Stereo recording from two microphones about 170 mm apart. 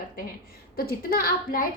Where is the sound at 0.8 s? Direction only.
55° left (ahead or behind).